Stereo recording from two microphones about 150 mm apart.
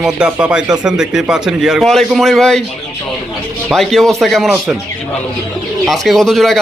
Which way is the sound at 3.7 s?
Centre (ahead or behind).